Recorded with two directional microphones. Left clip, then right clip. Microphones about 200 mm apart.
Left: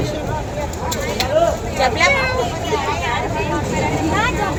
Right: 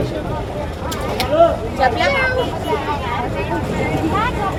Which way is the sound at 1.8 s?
20° right (ahead or behind).